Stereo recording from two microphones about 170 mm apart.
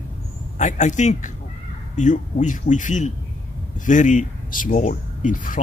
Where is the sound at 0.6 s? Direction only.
45° left (ahead or behind).